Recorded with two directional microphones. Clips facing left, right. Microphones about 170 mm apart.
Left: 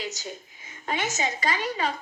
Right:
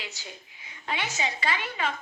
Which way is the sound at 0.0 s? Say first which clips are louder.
Left 7 dB; 40° left (ahead or behind).